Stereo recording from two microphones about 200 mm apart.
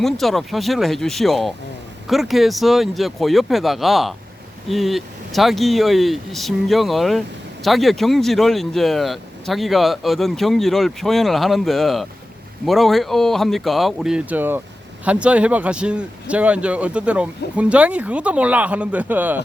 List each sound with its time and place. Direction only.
0.0 s speech: centre (ahead or behind)